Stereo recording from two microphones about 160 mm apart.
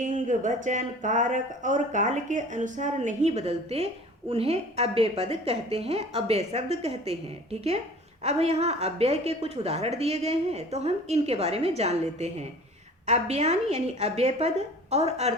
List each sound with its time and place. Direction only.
0.0 s a woman's voice: 50° right (ahead or behind)
8.2 s a woman's voice: 45° right (ahead or behind)